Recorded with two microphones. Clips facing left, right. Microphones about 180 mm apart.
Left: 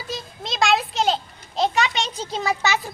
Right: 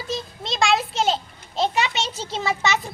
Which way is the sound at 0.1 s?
Centre (ahead or behind).